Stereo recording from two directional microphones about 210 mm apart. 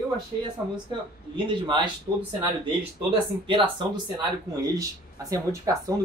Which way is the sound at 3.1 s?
25° right (ahead or behind).